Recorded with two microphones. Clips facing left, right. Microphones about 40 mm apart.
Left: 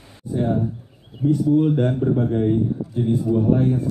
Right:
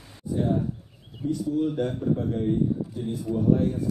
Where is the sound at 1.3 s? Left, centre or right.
Left.